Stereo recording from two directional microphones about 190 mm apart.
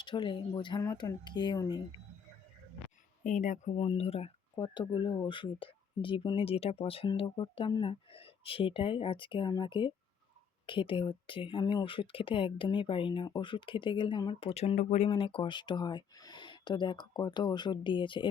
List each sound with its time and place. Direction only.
0.0 s speech: 25° left (ahead or behind)
3.2 s speech: 40° left (ahead or behind); by 18.3 s 25° left (ahead or behind)